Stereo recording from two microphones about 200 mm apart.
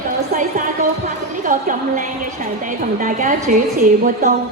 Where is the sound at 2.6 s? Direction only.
40° right (ahead or behind).